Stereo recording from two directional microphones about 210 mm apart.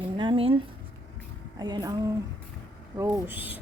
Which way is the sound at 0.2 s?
25° right (ahead or behind).